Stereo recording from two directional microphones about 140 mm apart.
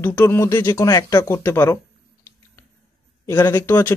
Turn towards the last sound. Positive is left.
turn(degrees=20)  # may be behind; listen again after turning